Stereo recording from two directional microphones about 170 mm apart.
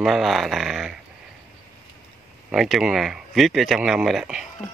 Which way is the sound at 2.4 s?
Centre (ahead or behind).